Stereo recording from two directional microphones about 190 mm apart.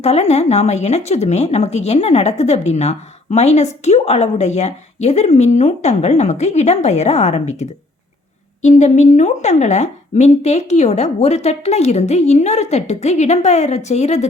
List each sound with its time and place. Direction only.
0.0 s a woman's voice: 35° left (ahead or behind)